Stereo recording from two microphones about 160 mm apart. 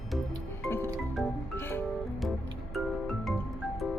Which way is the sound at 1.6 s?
15° left (ahead or behind).